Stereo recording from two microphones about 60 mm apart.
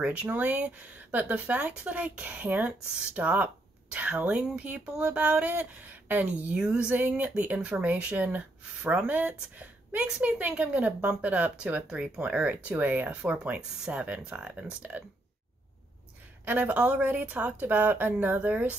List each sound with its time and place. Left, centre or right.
0.0 s speech: right
16.4 s speech: right